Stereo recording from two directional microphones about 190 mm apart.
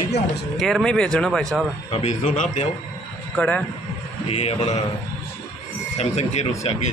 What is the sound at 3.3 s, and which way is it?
Speech, 5° left (ahead or behind).